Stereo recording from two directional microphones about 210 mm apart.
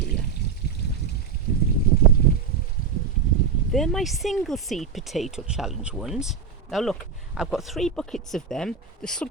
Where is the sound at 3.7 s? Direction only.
Centre (ahead or behind).